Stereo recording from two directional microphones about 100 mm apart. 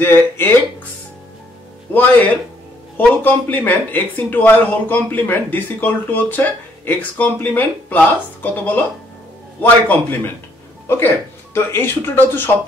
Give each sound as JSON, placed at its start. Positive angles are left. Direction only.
{"t": 0.0, "sound": "speech", "side_deg": 20}
{"t": 3.0, "sound": "speech", "side_deg": 15}